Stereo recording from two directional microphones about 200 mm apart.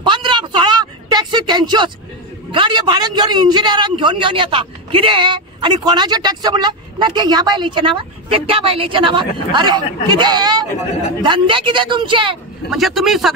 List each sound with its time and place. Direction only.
0.0 s a sound: 25° right (ahead or behind)
2.5 s a man's voice: 25° right (ahead or behind)
12.6 s a man's voice: centre (ahead or behind)